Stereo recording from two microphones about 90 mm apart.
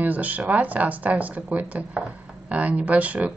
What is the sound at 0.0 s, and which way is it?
Speech, 20° right (ahead or behind).